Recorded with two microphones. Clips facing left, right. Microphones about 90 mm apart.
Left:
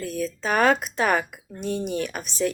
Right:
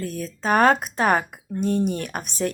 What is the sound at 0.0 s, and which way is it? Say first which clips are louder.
Speech: even; 40° right (ahead or behind).